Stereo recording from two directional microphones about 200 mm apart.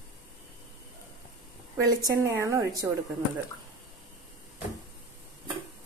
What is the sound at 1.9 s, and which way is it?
A woman's voice, 15° right (ahead or behind).